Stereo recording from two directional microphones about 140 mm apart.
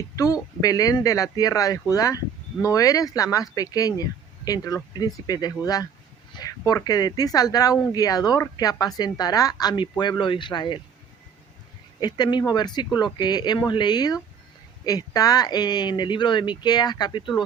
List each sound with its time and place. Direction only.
0.2 s speech: 25° left (ahead or behind)
11.9 s speech: 30° left (ahead or behind)